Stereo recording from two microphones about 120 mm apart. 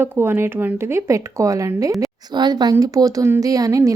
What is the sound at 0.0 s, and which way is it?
A woman's voice, 20° right (ahead or behind).